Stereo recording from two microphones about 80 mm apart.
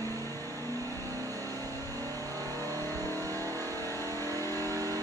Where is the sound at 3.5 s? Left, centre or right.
Right.